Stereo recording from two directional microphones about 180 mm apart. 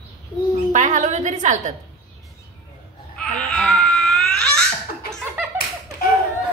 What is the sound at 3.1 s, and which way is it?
Crying, 5° left (ahead or behind).